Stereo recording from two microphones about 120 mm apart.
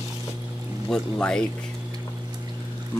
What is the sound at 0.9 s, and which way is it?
Speech, 10° left (ahead or behind).